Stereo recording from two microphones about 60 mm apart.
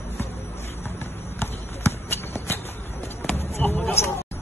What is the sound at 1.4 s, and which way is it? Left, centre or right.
Shuffle, left.